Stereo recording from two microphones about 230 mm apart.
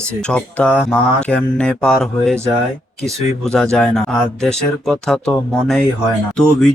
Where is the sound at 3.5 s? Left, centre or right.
Centre.